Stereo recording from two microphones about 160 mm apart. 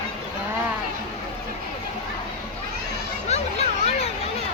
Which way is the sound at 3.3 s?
40° left (ahead or behind).